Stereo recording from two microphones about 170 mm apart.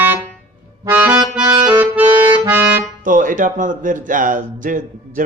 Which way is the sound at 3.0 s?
50° right (ahead or behind).